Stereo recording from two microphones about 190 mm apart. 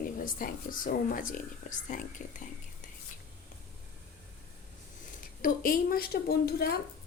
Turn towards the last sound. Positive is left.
turn(degrees=55)  # may be behind; listen again after turning